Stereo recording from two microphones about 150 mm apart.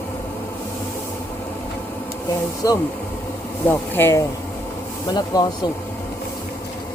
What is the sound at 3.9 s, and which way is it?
Speech, 15° left (ahead or behind).